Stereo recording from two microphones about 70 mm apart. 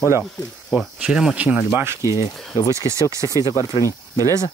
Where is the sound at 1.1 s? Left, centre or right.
Centre.